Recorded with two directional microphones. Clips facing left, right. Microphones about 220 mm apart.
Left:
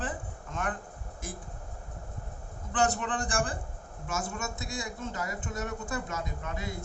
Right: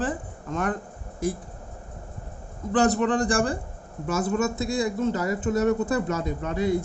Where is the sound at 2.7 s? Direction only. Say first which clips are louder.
Right 8 dB; 35° right (ahead or behind).